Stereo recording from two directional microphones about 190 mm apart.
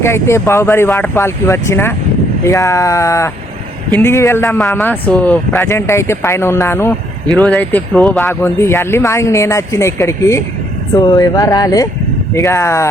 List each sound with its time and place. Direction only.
0.0 s a man's voice: 15° left (ahead or behind)